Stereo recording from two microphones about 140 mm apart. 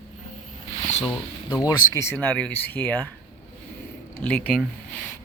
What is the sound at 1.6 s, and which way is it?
Speech, 20° left (ahead or behind).